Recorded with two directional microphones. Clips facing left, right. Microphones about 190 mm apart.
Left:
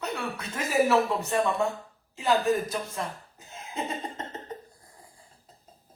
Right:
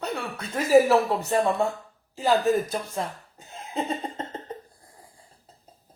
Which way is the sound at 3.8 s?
30° right (ahead or behind).